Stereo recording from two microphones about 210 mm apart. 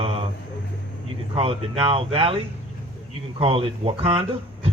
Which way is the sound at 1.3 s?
25° right (ahead or behind).